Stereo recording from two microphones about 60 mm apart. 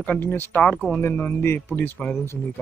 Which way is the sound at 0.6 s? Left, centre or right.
Left.